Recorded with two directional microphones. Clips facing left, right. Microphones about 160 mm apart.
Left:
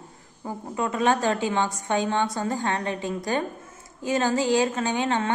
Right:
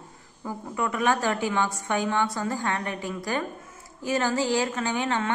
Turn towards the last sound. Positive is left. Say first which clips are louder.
# left 2 dB
turn(degrees=20)  # may be behind; listen again after turning